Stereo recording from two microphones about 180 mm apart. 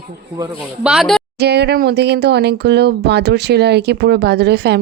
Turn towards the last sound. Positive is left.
turn(degrees=-65)  # may be behind; listen again after turning